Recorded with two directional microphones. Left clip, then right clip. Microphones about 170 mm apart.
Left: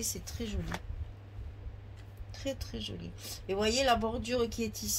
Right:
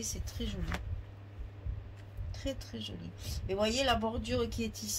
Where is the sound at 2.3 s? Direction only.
45° left (ahead or behind).